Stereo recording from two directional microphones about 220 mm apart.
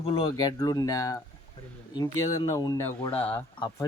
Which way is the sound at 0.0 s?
20° left (ahead or behind).